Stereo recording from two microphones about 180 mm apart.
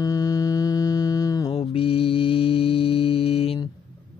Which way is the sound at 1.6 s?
30° left (ahead or behind).